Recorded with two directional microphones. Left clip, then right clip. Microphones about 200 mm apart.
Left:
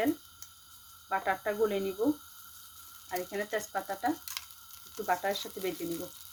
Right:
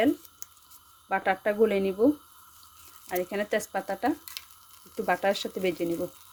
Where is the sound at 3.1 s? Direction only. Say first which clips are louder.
Right 6 dB; 50° right (ahead or behind).